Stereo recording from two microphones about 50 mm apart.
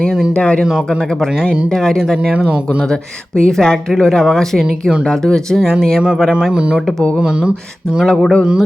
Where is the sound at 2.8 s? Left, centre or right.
Centre.